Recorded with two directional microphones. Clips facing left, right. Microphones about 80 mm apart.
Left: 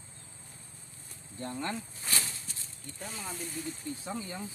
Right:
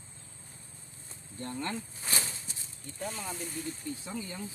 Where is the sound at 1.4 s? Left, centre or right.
Left.